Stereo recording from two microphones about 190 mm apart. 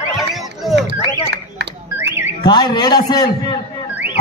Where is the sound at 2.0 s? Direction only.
10° right (ahead or behind).